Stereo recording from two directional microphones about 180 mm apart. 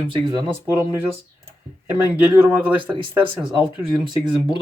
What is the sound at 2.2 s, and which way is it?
Speech, 10° right (ahead or behind).